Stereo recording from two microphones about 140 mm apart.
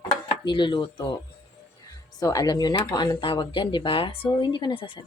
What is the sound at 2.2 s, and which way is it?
Speech, 25° left (ahead or behind).